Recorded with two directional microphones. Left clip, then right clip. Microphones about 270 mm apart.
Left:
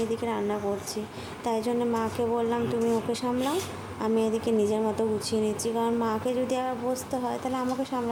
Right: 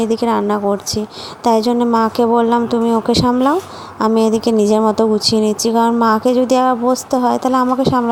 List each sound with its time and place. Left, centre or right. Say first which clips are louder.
0.1 s speech: right 13 dB; right